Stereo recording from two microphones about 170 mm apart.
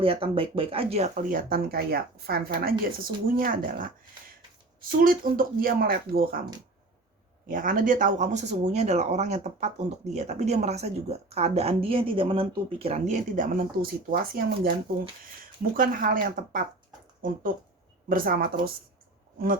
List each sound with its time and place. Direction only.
0.0 s speech: 35° right (ahead or behind); by 3.8 s 55° right (ahead or behind)
4.9 s speech: 55° right (ahead or behind)
7.4 s speech: 55° right (ahead or behind)
18.1 s speech: 60° right (ahead or behind)